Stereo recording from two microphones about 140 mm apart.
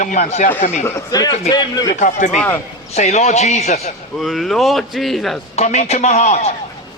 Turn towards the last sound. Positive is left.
turn(degrees=55)  # may be behind; listen again after turning